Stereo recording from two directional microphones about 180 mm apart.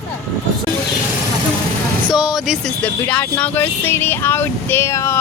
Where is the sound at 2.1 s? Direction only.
5° right (ahead or behind).